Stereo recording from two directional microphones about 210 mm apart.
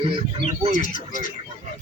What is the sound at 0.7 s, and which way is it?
Speech, 40° left (ahead or behind).